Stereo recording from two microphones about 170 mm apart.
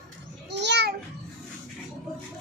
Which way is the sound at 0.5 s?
90° right.